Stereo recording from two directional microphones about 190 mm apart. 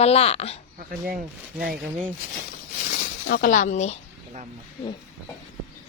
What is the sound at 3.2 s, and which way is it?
Speech, 45° left (ahead or behind).